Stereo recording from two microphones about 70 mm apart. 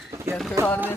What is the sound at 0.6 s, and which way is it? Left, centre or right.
Speech, right.